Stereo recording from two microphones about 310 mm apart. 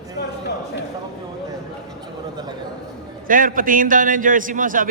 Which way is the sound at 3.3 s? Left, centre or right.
Right.